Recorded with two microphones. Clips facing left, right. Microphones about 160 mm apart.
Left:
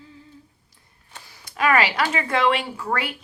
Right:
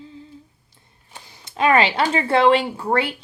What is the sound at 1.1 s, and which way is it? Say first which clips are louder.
Speech: right 2 dB; 25° right (ahead or behind).